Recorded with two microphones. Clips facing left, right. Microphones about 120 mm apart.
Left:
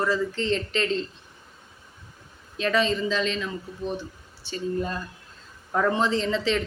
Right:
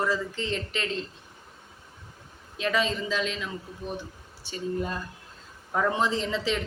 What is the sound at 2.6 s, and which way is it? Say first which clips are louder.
Speech: left 3 dB; 10° right (ahead or behind).